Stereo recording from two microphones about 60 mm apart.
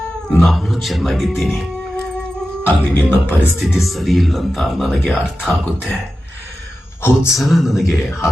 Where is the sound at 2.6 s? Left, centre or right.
Left.